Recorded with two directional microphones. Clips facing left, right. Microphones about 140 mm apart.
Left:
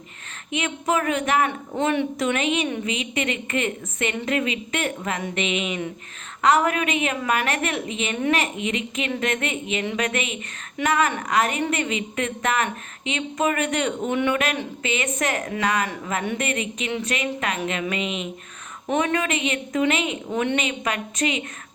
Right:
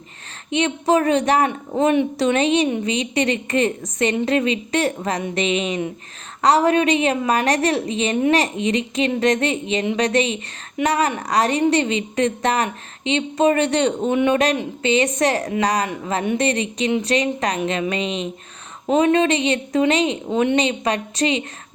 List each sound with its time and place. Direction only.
0.5 s speech: 35° right (ahead or behind)
1.7 s a woman's voice: 20° right (ahead or behind)
2.1 s speech: 35° right (ahead or behind)
20.3 s a woman's voice: 20° right (ahead or behind)
20.6 s speech: 35° right (ahead or behind)